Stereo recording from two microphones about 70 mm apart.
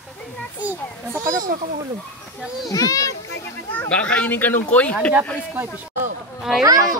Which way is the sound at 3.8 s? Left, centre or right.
Centre.